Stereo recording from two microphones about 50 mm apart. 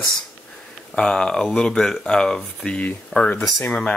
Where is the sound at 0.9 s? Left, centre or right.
Centre.